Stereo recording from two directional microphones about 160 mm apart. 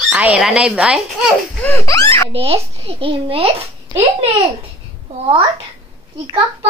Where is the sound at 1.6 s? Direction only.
15° left (ahead or behind).